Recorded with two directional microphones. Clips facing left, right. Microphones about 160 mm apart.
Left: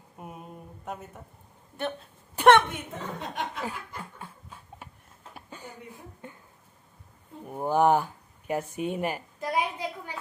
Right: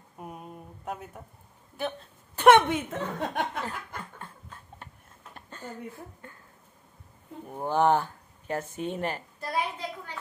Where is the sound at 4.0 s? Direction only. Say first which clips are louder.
Left 1 dB; 10° left (ahead or behind).